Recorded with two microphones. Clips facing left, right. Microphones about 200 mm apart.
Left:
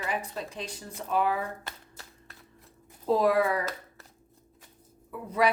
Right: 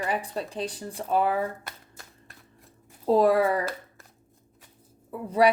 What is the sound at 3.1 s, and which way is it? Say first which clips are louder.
Speech: right 3 dB; 30° right (ahead or behind).